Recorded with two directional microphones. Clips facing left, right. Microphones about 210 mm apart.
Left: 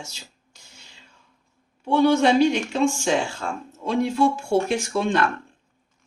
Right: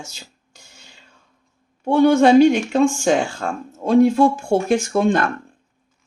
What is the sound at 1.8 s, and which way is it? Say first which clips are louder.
Speech: right 5 dB; 50° right (ahead or behind).